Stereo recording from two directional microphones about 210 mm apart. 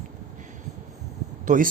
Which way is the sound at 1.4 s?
40° right (ahead or behind).